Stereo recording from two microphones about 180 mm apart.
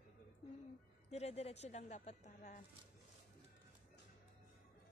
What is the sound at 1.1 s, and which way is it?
A woman's voice, 35° left (ahead or behind).